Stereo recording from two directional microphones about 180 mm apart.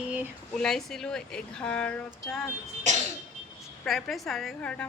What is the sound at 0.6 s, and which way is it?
Speech, 5° left (ahead or behind).